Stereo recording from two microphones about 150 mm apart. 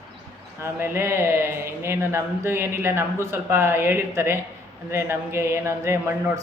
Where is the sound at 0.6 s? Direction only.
15° right (ahead or behind).